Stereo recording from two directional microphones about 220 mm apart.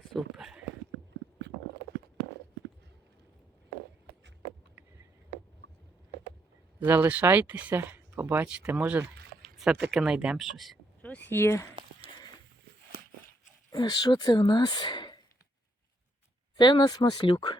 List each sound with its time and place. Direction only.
0.1 s a sound: centre (ahead or behind)
6.7 s speech: 10° right (ahead or behind); by 11.7 s 10° left (ahead or behind)
13.7 s speech: 20° left (ahead or behind)
16.6 s speech: 20° left (ahead or behind)